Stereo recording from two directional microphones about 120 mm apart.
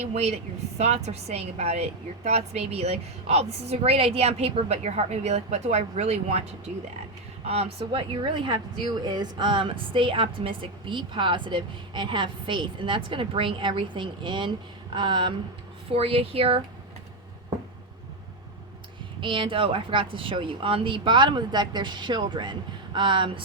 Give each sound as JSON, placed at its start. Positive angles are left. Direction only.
{"t": 0.0, "sound": "a woman's voice", "side_deg": -65}
{"t": 15.9, "sound": "speech", "side_deg": -55}
{"t": 19.2, "sound": "speech", "side_deg": -45}